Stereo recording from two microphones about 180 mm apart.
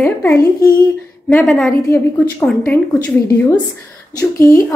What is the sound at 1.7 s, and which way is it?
Speech, 15° left (ahead or behind).